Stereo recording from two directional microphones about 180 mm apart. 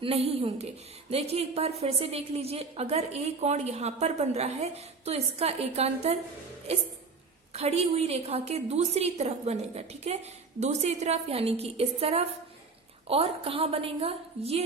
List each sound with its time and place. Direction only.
0.0 s a woman's voice: 35° right (ahead or behind)
7.5 s a woman's voice: 35° right (ahead or behind)